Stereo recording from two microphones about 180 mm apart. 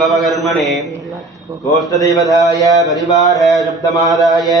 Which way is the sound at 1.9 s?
20° left (ahead or behind).